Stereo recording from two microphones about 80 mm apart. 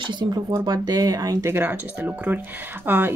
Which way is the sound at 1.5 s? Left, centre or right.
Right.